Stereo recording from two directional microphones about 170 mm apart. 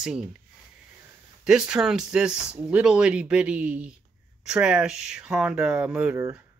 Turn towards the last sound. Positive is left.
turn(degrees=-10)  # may be behind; listen again after turning